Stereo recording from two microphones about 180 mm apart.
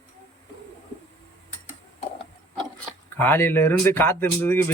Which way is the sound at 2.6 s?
10° left (ahead or behind).